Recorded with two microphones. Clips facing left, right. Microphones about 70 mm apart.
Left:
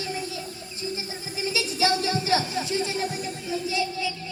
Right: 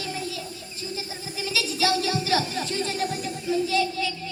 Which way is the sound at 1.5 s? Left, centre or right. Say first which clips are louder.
Even; left.